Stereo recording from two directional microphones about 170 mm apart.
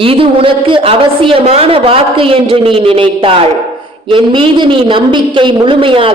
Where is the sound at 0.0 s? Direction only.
30° right (ahead or behind).